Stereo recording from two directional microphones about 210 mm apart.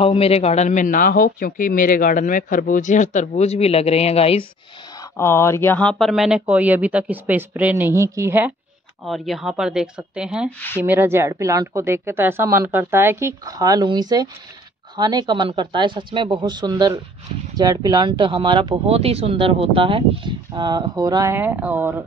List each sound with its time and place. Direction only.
0.0 s speech: 25° left (ahead or behind)
5.1 s speech: 10° left (ahead or behind); by 22.0 s 10° right (ahead or behind)